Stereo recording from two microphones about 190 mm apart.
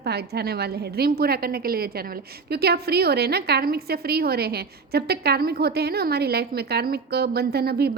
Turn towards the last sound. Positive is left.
turn(degrees=-55)  # may be behind; listen again after turning